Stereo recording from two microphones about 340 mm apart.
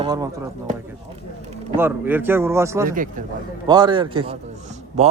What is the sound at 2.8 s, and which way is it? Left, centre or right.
Speech, right.